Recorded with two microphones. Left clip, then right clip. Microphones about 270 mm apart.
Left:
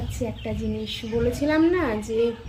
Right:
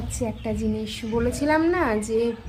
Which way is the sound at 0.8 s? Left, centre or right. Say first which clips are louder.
Left 3 dB; centre.